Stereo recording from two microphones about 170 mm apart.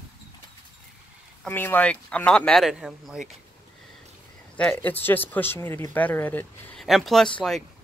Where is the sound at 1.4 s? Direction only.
10° left (ahead or behind).